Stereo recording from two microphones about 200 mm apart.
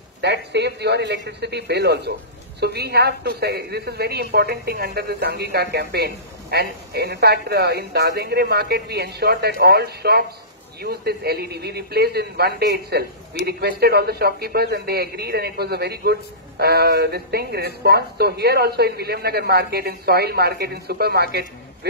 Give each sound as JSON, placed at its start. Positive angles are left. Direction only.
{"t": 0.2, "sound": "a man's voice", "side_deg": -60}